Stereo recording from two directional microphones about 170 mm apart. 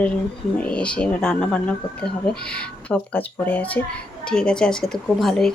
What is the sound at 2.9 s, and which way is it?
Speech, 10° left (ahead or behind).